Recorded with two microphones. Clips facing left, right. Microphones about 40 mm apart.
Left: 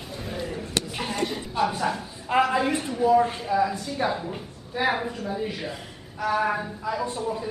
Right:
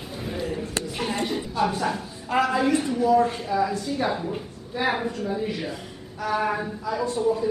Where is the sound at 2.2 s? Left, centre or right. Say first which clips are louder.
Even; centre.